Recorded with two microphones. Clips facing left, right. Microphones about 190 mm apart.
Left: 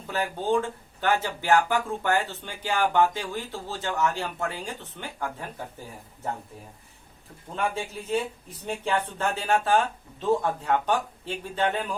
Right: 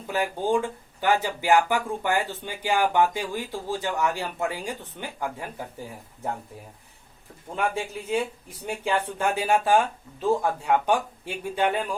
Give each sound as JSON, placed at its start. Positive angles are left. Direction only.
{"t": 0.1, "sound": "speech", "side_deg": -15}
{"t": 7.5, "sound": "speech", "side_deg": -10}